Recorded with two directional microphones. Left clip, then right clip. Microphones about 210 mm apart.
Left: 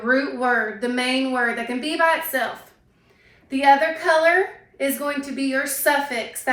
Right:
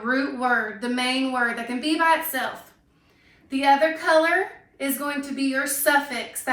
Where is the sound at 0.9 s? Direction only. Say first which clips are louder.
Left 1 dB; 15° right (ahead or behind).